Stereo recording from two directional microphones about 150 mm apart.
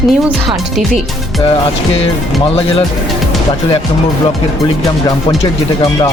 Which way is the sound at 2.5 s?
40° left (ahead or behind).